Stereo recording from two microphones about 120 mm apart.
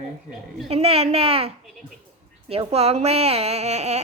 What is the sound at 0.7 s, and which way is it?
Speech, 55° right (ahead or behind).